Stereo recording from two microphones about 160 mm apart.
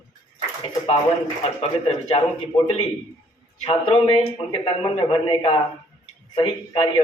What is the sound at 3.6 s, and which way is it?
A man's voice, 35° left (ahead or behind).